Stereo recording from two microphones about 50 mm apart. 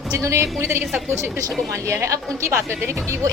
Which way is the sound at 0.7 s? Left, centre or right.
Right.